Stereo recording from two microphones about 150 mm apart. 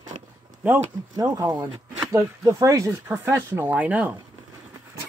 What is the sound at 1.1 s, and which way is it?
Speech, 25° right (ahead or behind).